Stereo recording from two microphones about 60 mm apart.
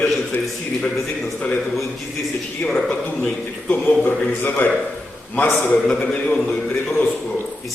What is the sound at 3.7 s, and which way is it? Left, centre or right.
Speech, left.